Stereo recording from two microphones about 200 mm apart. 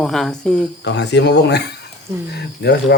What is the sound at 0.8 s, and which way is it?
Speech, 60° left (ahead or behind).